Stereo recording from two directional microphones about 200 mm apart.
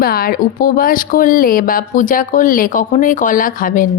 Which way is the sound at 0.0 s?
45° left (ahead or behind).